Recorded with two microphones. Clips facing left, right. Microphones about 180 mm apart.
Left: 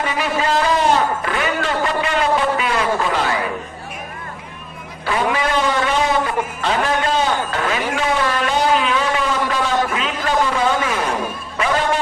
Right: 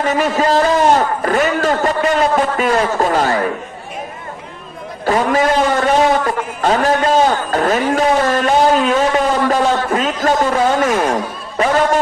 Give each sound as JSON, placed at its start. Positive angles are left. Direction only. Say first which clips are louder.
{"t": 0.0, "sound": "a man's voice", "louder": "right 5 dB", "side_deg": -45}
{"t": 5.0, "sound": "a man's voice", "louder": "right 5 dB", "side_deg": -45}